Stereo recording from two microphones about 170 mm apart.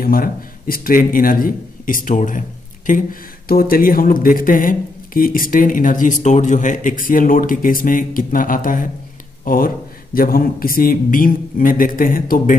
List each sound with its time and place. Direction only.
0.0 s speech: 60° left (ahead or behind)